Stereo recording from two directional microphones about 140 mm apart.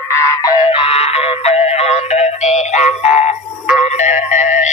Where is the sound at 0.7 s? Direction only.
45° left (ahead or behind).